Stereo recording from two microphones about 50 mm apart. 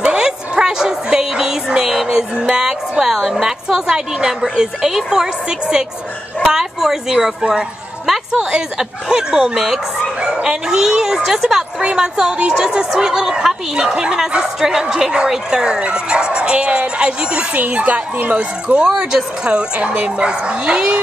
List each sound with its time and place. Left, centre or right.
0.0 s speech: centre
18.9 s speech: centre